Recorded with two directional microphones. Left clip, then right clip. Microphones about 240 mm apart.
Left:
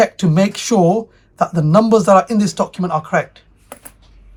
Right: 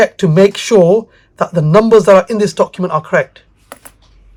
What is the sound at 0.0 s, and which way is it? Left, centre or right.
Speech, right.